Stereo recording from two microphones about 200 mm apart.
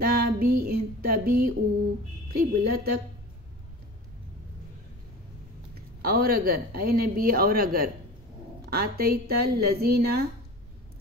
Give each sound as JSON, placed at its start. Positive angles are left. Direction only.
{"t": 0.0, "sound": "child singing", "side_deg": -50}
{"t": 2.3, "sound": "speech", "side_deg": -50}
{"t": 6.0, "sound": "speech", "side_deg": -50}